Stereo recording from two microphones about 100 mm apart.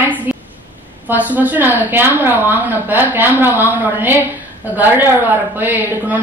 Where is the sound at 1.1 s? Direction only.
15° right (ahead or behind).